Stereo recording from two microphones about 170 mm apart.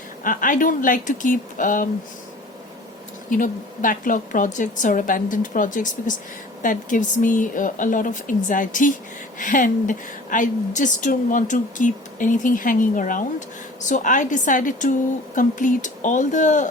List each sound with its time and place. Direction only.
0.3 s a woman's voice: 50° left (ahead or behind)
3.2 s a woman's voice: 50° left (ahead or behind)